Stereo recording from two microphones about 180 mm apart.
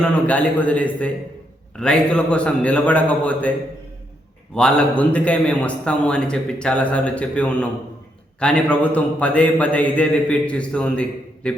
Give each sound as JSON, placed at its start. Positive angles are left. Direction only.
{"t": 0.0, "sound": "a man's voice", "side_deg": 5}
{"t": 4.5, "sound": "a man's voice", "side_deg": 5}